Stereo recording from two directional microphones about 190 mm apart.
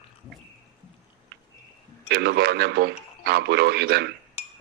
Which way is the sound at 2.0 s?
60° right (ahead or behind).